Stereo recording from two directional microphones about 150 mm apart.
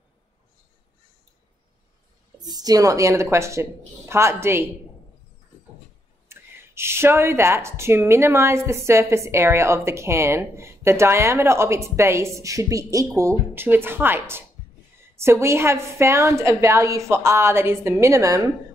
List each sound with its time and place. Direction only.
2.4 s a woman's voice: 25° right (ahead or behind)
6.2 s speech: 15° right (ahead or behind)
15.4 s a woman's voice: 15° right (ahead or behind)